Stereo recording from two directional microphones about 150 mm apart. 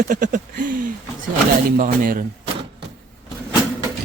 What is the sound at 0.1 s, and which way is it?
A man's voice, 65° right (ahead or behind).